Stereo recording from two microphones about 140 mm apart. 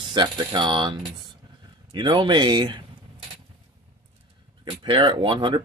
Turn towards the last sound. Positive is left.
turn(degrees=-40)  # may be behind; listen again after turning